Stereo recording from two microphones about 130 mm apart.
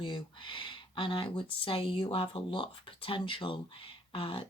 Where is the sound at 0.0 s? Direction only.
40° left (ahead or behind).